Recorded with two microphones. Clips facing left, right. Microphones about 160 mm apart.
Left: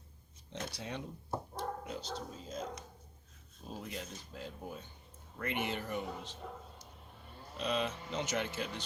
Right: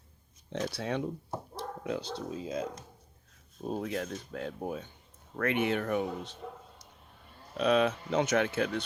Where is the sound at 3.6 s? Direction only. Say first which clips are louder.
Right 10 dB; 65° right (ahead or behind).